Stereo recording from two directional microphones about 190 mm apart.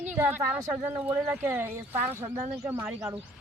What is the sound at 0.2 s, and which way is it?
Speech, 10° right (ahead or behind).